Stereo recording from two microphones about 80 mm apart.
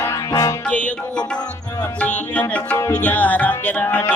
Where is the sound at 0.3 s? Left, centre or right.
Left.